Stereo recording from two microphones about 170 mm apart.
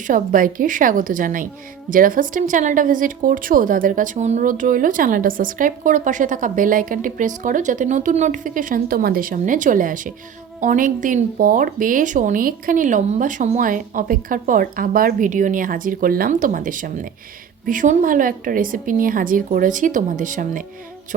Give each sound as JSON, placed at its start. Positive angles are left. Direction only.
{"t": 0.1, "sound": "speech", "side_deg": -50}